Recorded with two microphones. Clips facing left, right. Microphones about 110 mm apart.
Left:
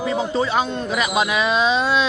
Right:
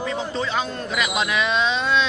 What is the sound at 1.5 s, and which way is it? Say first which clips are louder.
Speech: left 3 dB; 10° left (ahead or behind).